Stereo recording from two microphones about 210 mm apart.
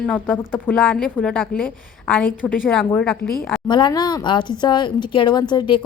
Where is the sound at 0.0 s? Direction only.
Centre (ahead or behind).